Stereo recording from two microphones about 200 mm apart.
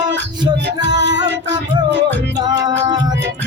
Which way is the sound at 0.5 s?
60° right (ahead or behind).